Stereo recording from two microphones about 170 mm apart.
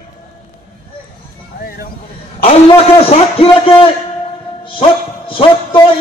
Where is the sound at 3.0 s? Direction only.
35° left (ahead or behind).